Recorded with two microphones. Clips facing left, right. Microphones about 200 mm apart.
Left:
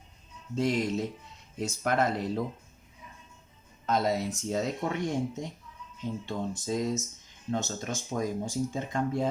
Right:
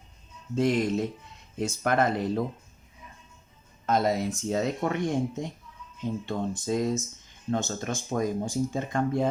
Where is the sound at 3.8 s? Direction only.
50° right (ahead or behind).